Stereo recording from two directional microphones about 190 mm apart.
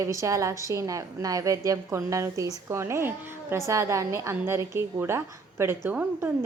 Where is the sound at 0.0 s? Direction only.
15° right (ahead or behind).